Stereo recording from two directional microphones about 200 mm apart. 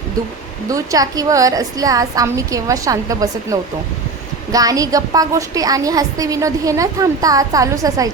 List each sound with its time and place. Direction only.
0.7 s a woman's voice: 15° right (ahead or behind)